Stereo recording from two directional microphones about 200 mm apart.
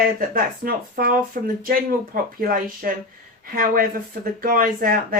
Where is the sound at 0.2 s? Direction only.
45° right (ahead or behind).